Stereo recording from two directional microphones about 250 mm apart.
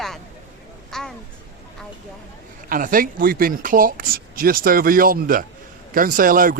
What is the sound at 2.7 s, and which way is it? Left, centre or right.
Speech, right.